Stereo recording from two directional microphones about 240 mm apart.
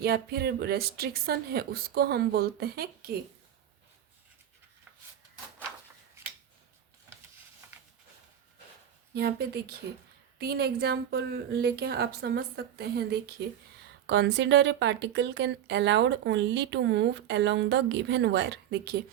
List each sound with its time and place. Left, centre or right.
0.0 s speech: right
7.6 s a sound: centre
9.1 s speech: right